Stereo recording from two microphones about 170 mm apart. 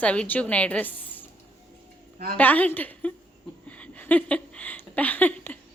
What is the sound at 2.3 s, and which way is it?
Speech, 10° left (ahead or behind).